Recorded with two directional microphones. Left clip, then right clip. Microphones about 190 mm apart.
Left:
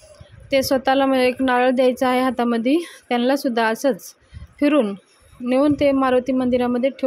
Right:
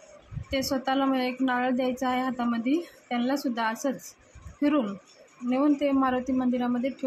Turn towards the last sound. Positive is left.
turn(degrees=40)  # may be behind; listen again after turning